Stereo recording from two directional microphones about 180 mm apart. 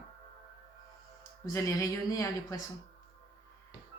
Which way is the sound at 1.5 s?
20° left (ahead or behind).